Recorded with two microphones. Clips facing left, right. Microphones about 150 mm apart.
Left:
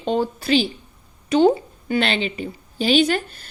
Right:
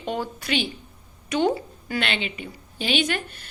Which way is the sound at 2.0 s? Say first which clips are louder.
Left 6 dB; 35° left (ahead or behind).